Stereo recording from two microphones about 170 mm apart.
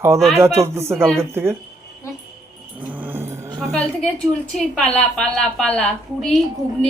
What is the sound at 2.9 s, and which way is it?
Music, 10° right (ahead or behind).